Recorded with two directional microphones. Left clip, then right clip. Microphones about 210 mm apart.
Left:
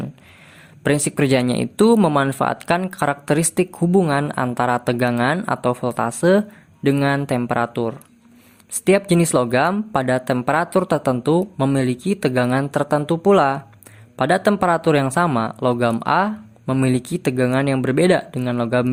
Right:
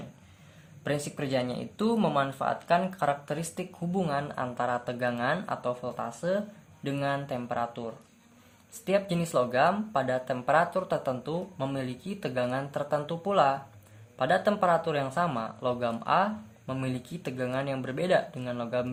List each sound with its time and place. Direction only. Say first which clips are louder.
0.9 s speech: left 13 dB; 45° left (ahead or behind)